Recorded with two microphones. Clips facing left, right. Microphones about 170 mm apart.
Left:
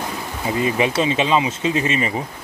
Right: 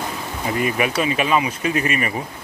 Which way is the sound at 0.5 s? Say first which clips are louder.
Left 2 dB; 25° left (ahead or behind).